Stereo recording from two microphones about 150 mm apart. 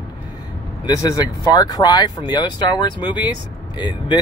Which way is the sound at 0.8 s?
25° left (ahead or behind).